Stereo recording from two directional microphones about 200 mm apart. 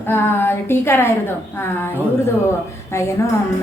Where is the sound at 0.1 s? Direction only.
10° left (ahead or behind).